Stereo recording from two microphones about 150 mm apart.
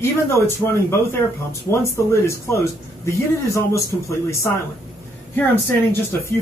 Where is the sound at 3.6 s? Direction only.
20° left (ahead or behind).